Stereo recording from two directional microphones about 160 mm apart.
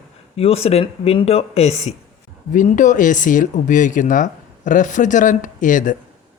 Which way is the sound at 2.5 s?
55° left (ahead or behind).